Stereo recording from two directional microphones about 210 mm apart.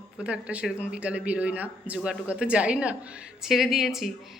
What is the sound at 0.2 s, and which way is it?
Speech, 5° right (ahead or behind).